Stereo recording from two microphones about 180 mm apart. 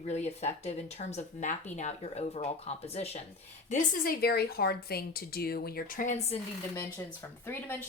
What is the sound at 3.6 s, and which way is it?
A woman's voice, 45° left (ahead or behind).